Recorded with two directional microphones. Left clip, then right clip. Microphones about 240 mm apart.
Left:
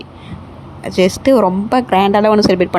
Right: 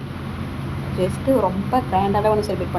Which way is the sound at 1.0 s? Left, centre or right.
Left.